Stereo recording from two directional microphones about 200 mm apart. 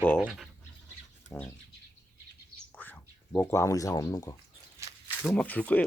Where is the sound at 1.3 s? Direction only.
10° left (ahead or behind).